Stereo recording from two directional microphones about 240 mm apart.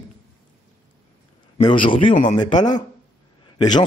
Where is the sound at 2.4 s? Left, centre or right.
Centre.